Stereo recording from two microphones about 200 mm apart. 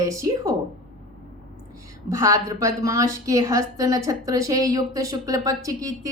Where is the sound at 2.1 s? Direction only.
15° right (ahead or behind).